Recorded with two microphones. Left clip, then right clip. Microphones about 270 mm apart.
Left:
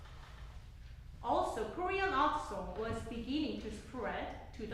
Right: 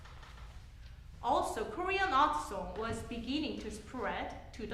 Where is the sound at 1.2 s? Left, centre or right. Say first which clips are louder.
Right 2 dB; right.